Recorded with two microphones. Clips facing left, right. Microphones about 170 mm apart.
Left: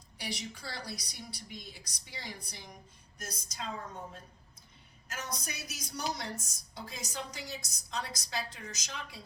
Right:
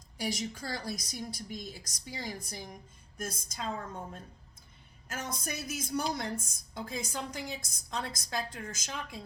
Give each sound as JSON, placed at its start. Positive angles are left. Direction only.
{"t": 0.2, "sound": "a woman's voice", "side_deg": -45}
{"t": 5.0, "sound": "a woman's voice", "side_deg": -50}